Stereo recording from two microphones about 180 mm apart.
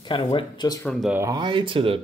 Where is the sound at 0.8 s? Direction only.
Centre (ahead or behind).